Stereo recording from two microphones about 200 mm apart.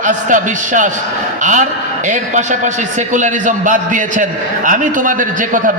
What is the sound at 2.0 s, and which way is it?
A man's voice, 40° right (ahead or behind).